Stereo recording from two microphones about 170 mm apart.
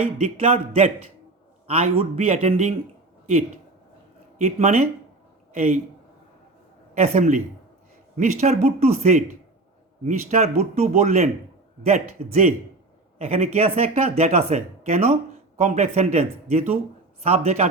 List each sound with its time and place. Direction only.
0.0 s speech: 35° right (ahead or behind)
4.4 s speech: 40° right (ahead or behind)
7.0 s speech: 45° right (ahead or behind)
12.3 s speech: 40° right (ahead or behind)